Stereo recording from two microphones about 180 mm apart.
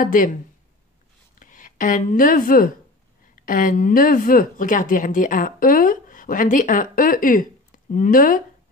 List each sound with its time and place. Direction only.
0.0 s speech: 50° left (ahead or behind)
1.4 s speech: 45° left (ahead or behind)